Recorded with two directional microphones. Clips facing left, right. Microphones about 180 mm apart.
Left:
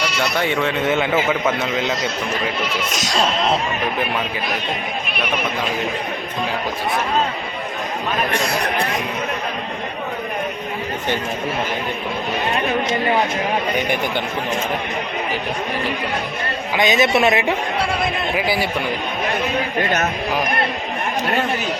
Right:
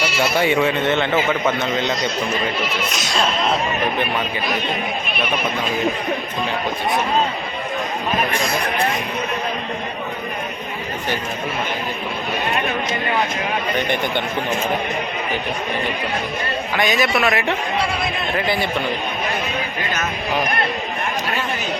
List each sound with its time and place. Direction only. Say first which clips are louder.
0.0 s speech: right 2 dB; 5° right (ahead or behind)
0.8 s a man's voice: even; 10° left (ahead or behind)
2.9 s speech: left 4 dB; 40° left (ahead or behind)
13.7 s a man's voice: even; 10° left (ahead or behind)
16.7 s a man's voice: left 3 dB; 20° left (ahead or behind)
18.3 s a man's voice: right 1 dB; 10° left (ahead or behind)
19.8 s speech: left 7 dB; 65° left (ahead or behind)